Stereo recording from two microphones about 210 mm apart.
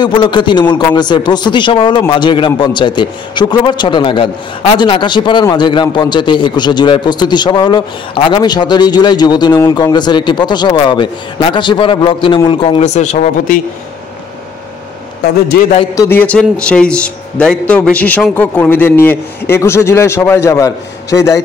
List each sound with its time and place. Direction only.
0.0 s a man's voice: 20° left (ahead or behind)
15.9 s a man's voice: 15° left (ahead or behind)